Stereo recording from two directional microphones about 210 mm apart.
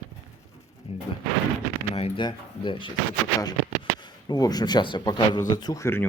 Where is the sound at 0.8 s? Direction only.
30° left (ahead or behind).